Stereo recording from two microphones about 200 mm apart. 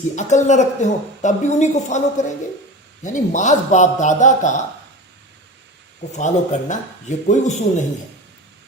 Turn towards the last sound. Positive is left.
turn(degrees=35)  # may be behind; listen again after turning